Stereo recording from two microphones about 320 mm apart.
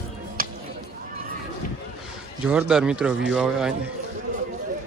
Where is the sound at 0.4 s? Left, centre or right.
Right.